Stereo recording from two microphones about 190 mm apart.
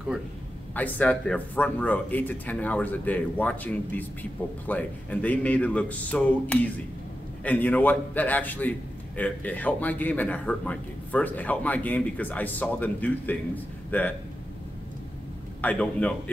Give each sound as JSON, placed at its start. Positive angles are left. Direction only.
{"t": 0.7, "sound": "a man's voice", "side_deg": 10}
{"t": 15.6, "sound": "a man's voice", "side_deg": 10}